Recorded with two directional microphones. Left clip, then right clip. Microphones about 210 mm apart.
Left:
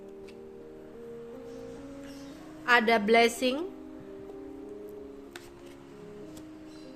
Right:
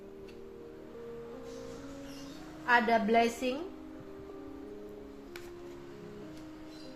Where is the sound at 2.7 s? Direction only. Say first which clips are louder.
Left 4 dB; 45° left (ahead or behind).